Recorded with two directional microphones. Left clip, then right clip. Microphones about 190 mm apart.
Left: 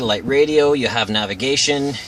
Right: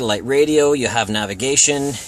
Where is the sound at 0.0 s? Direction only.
30° right (ahead or behind).